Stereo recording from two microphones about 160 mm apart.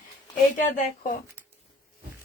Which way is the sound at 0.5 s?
55° left (ahead or behind).